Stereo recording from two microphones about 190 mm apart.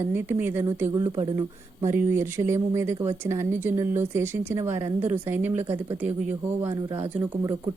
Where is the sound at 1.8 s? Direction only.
15° right (ahead or behind).